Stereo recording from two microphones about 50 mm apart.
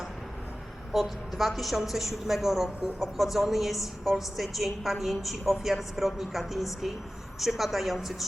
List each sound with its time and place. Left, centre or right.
0.9 s a woman's voice: centre